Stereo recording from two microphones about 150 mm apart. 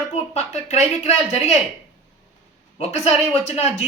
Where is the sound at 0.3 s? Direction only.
45° left (ahead or behind).